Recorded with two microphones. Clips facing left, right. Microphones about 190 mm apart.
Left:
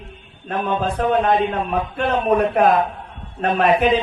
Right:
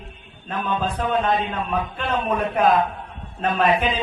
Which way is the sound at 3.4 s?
55° left (ahead or behind).